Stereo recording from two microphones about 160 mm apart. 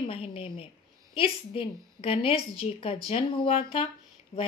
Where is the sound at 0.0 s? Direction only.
35° left (ahead or behind).